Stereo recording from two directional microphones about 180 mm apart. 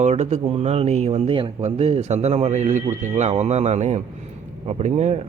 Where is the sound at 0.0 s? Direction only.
40° right (ahead or behind).